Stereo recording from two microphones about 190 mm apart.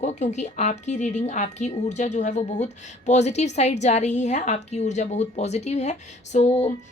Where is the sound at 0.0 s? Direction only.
35° left (ahead or behind).